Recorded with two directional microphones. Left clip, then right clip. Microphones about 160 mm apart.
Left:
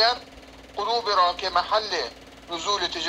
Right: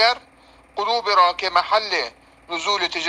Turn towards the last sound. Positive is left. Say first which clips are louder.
# right 4 dB
turn(degrees=-40)  # may be behind; listen again after turning